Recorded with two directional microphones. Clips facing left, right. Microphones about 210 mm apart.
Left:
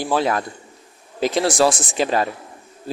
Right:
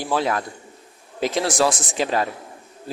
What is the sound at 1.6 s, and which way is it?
Speech, 30° left (ahead or behind).